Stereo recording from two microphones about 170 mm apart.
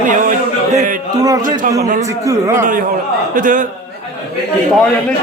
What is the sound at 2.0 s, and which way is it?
Speech, 20° right (ahead or behind).